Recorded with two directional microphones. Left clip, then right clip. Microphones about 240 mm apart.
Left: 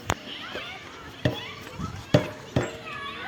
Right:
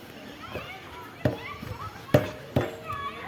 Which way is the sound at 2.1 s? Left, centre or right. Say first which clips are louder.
Even; centre.